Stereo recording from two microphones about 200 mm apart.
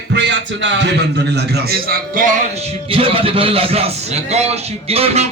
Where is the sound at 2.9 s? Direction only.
30° right (ahead or behind).